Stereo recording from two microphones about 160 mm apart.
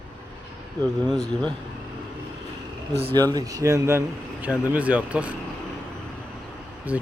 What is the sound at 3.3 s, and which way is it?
Speech, 25° right (ahead or behind).